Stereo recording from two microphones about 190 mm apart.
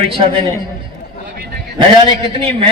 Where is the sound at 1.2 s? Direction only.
55° right (ahead or behind).